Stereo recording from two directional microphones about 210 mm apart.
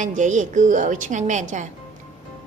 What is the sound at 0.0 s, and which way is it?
A woman's voice, 35° right (ahead or behind).